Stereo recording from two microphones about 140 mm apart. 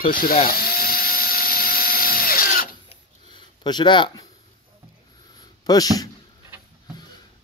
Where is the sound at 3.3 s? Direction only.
30° left (ahead or behind).